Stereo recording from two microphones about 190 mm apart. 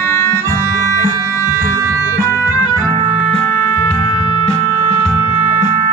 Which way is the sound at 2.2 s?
20° left (ahead or behind).